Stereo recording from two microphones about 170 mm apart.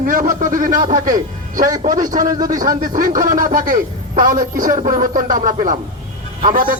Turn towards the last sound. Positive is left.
turn(degrees=-50)  # may be behind; listen again after turning